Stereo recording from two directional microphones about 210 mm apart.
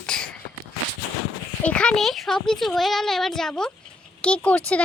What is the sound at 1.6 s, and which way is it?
Speech, 5° left (ahead or behind).